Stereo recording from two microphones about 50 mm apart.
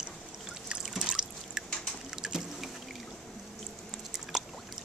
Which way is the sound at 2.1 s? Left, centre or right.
Centre.